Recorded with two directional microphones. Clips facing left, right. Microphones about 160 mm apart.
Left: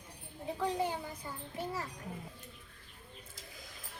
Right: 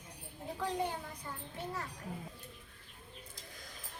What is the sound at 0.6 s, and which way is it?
Speech, 5° left (ahead or behind).